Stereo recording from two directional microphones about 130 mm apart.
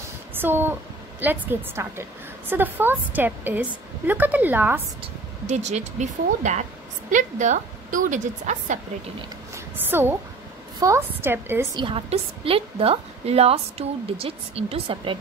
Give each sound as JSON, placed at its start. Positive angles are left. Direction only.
{"t": 0.3, "sound": "a woman's voice", "side_deg": -15}
{"t": 5.5, "sound": "a woman's voice", "side_deg": -65}
{"t": 9.5, "sound": "a sound", "side_deg": -15}
{"t": 10.8, "sound": "a woman's voice", "side_deg": -20}
{"t": 11.7, "sound": "a woman's voice", "side_deg": -40}